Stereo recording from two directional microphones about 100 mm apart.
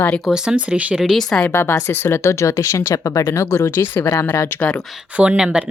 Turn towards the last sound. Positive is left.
turn(degrees=-10)  # may be behind; listen again after turning